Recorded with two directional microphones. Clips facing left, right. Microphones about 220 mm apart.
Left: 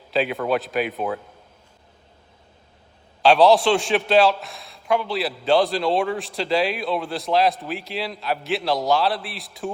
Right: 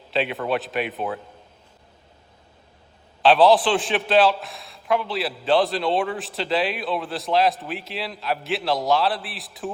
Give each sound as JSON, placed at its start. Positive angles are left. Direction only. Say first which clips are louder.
{"t": 0.1, "sound": "a man's voice", "louder": "left 2 dB", "side_deg": 0}
{"t": 3.2, "sound": "a man's voice", "louder": "left 1 dB", "side_deg": 0}